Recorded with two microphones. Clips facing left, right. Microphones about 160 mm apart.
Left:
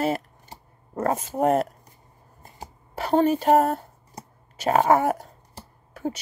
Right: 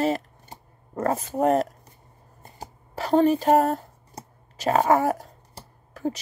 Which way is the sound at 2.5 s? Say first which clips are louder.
Even; 35° right (ahead or behind).